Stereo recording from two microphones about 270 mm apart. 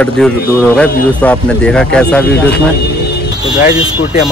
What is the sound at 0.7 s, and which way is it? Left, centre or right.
Speech, centre.